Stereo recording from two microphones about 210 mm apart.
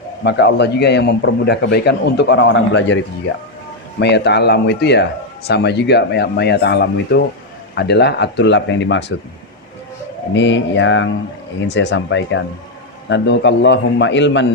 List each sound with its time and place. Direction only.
0.3 s a man's voice: 55° left (ahead or behind)
4.0 s a man's voice: 55° left (ahead or behind)
10.3 s a man's voice: 60° left (ahead or behind)